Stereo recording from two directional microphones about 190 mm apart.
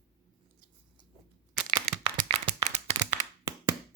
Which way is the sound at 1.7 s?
25° right (ahead or behind).